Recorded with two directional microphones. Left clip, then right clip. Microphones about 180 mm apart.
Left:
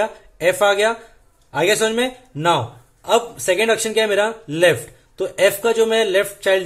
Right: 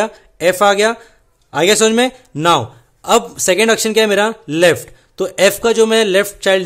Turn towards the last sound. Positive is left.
turn(degrees=-40)  # may be behind; listen again after turning